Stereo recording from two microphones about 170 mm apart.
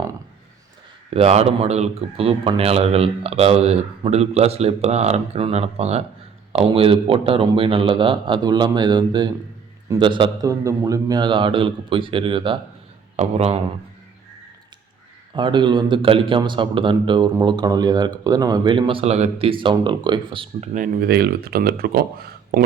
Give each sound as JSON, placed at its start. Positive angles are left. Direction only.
{"t": 1.1, "sound": "a man's voice", "side_deg": -40}
{"t": 15.4, "sound": "a man's voice", "side_deg": -25}
{"t": 20.7, "sound": "speech", "side_deg": -55}